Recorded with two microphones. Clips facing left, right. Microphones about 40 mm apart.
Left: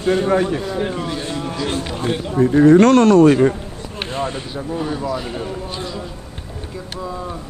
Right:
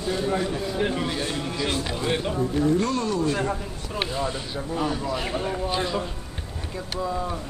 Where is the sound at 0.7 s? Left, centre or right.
Centre.